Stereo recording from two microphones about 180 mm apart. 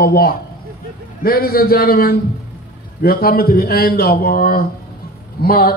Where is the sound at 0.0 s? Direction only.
55° left (ahead or behind).